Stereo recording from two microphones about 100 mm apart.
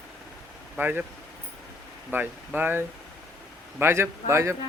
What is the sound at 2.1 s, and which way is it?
Speech, 20° right (ahead or behind).